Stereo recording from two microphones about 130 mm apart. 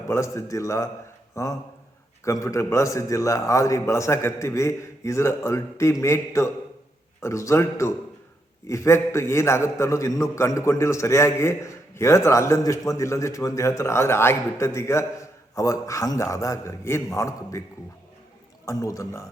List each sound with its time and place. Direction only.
0.1 s a man's voice: 20° left (ahead or behind)
18.6 s a man's voice: 25° left (ahead or behind)